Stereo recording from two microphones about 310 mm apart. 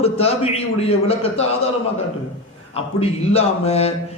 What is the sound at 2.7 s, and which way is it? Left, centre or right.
A man's voice, centre.